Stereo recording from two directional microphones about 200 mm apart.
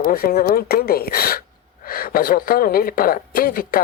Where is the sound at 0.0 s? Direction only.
45° left (ahead or behind).